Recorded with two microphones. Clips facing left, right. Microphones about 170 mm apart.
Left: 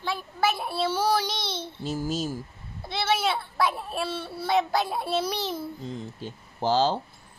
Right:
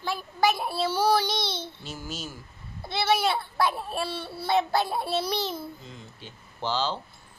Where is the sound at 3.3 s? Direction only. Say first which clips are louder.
Even; centre (ahead or behind).